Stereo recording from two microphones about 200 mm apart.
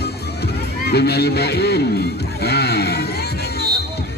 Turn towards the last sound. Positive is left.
turn(degrees=55)  # may be behind; listen again after turning